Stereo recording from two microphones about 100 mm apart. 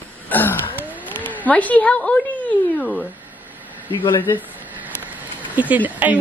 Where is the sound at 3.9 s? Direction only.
55° left (ahead or behind).